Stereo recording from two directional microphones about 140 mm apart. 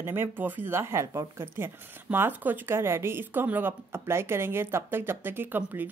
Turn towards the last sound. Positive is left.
turn(degrees=-15)  # may be behind; listen again after turning